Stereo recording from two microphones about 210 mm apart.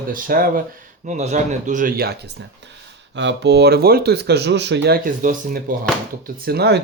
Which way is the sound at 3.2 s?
55° right (ahead or behind).